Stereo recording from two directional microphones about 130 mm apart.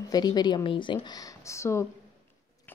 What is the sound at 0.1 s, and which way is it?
Speech, 30° left (ahead or behind).